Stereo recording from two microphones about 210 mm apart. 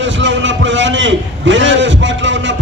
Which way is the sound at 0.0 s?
60° right (ahead or behind).